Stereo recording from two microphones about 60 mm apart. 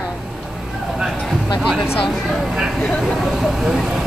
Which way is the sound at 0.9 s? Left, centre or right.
Centre.